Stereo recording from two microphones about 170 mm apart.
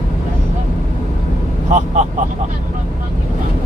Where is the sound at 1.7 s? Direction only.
45° right (ahead or behind).